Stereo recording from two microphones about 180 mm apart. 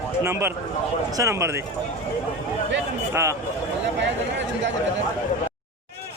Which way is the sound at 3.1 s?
15° right (ahead or behind).